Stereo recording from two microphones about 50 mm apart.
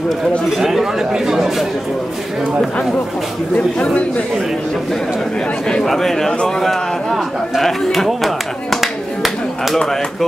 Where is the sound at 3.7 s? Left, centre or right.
Left.